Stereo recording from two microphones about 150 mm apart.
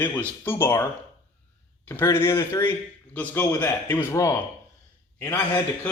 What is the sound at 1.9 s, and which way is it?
A man's voice, 15° left (ahead or behind).